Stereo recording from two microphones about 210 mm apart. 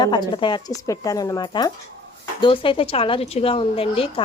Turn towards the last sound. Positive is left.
turn(degrees=25)  # may be behind; listen again after turning